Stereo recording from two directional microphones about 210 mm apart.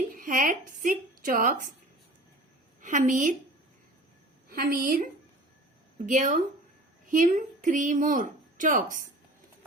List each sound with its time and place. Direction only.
0.2 s a woman's voice: 40° right (ahead or behind)
2.8 s a woman's voice: 35° right (ahead or behind)
4.4 s a woman's voice: 40° right (ahead or behind)
6.1 s a woman's voice: 40° right (ahead or behind)